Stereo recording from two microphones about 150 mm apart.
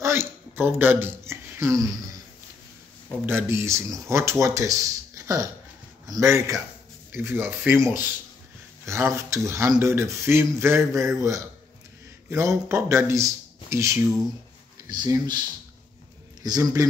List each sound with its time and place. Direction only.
0.0 s speech: 15° right (ahead or behind)
3.3 s speech: 15° right (ahead or behind)
16.4 s speech: 25° right (ahead or behind)